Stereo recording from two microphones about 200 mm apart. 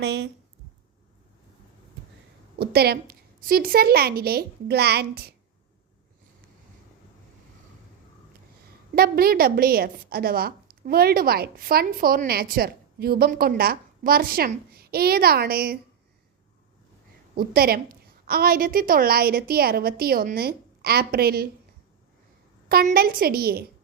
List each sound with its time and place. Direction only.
0.0 s speech: 60° right (ahead or behind)
2.6 s a woman's voice: 50° right (ahead or behind)
9.0 s a woman's voice: 50° right (ahead or behind)
17.3 s a woman's voice: 50° right (ahead or behind)
22.7 s a woman's voice: 50° right (ahead or behind)